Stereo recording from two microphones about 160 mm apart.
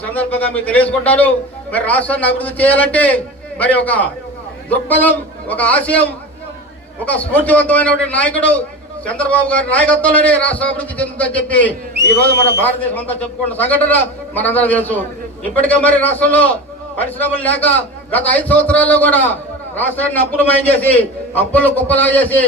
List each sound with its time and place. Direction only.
0.0 s a man's voice: 10° left (ahead or behind)